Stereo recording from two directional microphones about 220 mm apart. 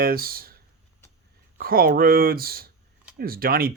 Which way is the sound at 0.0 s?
40° right (ahead or behind).